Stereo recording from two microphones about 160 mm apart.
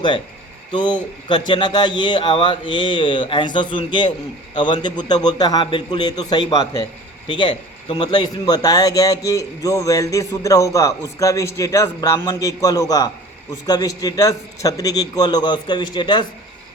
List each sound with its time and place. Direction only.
0.7 s a man's voice: 30° left (ahead or behind)